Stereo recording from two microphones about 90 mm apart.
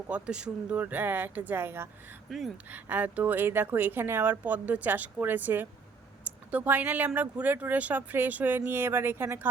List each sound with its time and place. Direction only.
0.1 s speech: 10° right (ahead or behind); by 1.9 s 25° right (ahead or behind)
2.3 s speech: centre (ahead or behind)
2.6 s speech: 20° right (ahead or behind)